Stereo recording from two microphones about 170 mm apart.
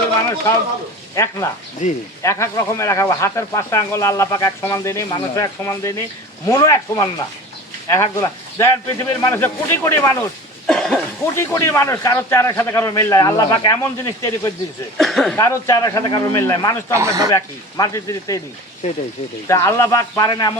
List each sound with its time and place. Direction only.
1.1 s speech: 15° left (ahead or behind)
1.8 s speech: 45° left (ahead or behind)
2.2 s speech: 15° left (ahead or behind)
10.7 s speech: 5° left (ahead or behind)
11.3 s speech: 15° left (ahead or behind)
14.9 s speech: centre (ahead or behind)
15.4 s speech: 15° left (ahead or behind)
16.9 s speech: 15° right (ahead or behind)
17.3 s speech: 20° left (ahead or behind)
19.5 s speech: 20° left (ahead or behind)